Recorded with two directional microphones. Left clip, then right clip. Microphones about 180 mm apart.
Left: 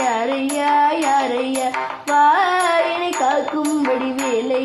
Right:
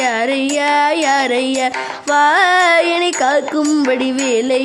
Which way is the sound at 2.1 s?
50° right (ahead or behind).